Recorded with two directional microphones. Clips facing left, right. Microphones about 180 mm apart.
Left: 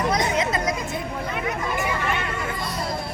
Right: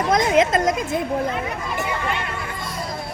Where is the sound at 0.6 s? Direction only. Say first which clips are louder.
Right 5 dB; 50° right (ahead or behind).